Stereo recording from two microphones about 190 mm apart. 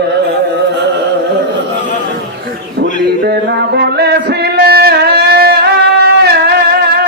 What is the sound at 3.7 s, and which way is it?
Music, 60° right (ahead or behind).